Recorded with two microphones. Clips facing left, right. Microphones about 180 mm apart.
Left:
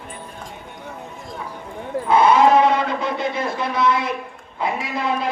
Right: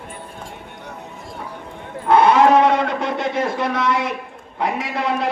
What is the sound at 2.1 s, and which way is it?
Sheep, 70° right (ahead or behind).